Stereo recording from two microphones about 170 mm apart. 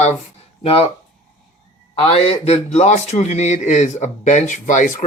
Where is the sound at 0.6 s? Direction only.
35° left (ahead or behind).